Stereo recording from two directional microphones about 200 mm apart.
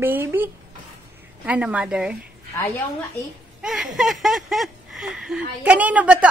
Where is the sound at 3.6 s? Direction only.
Centre (ahead or behind).